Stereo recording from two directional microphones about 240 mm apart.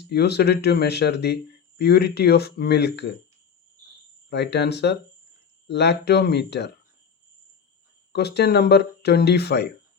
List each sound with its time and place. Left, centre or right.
0.1 s speech: left
4.3 s speech: left
8.1 s speech: left